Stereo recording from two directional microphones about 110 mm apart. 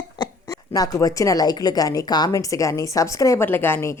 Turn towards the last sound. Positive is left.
turn(degrees=20)  # may be behind; listen again after turning